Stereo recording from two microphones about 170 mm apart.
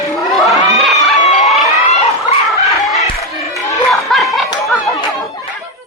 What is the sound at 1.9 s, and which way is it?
Chicken, 40° left (ahead or behind).